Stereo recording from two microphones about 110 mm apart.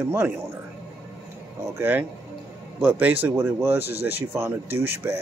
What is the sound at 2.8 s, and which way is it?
Speech, 15° right (ahead or behind).